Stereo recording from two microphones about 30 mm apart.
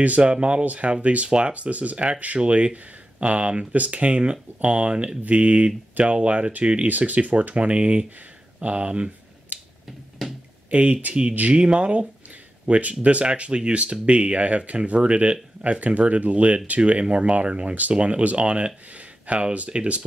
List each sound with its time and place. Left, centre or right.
0.2 s speech: right
1.6 s speech: right
3.7 s speech: right
6.9 s speech: right
7.5 s speech: right
9.5 s finger snapping: right
10.7 s speech: right
15.6 s speech: right
17.0 s speech: right
18.9 s a sound: right
19.7 s speech: right